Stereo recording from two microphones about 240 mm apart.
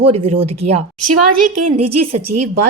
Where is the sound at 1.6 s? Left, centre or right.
Right.